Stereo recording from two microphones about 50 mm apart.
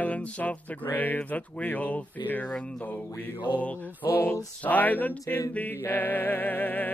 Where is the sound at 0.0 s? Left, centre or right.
Left.